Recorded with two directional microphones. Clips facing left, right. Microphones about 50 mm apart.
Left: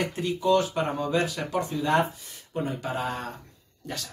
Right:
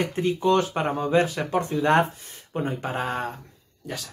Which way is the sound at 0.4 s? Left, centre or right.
Right.